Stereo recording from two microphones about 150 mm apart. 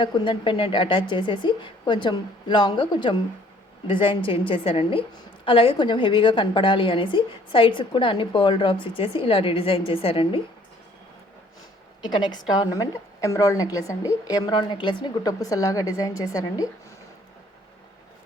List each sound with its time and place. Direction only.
0.0 s a woman's voice: 35° left (ahead or behind)
12.0 s a woman's voice: 30° left (ahead or behind)